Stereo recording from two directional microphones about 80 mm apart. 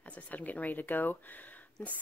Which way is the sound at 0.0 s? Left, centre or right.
Centre.